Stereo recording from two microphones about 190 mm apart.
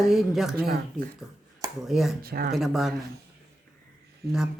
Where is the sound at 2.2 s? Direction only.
50° right (ahead or behind).